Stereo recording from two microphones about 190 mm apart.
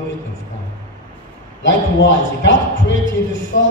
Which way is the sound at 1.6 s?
75° left (ahead or behind).